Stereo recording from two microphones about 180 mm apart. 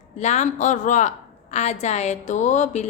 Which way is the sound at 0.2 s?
40° left (ahead or behind).